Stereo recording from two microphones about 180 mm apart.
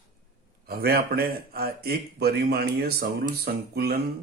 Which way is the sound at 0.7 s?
60° right (ahead or behind).